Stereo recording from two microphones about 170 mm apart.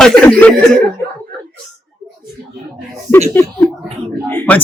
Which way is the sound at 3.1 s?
10° left (ahead or behind).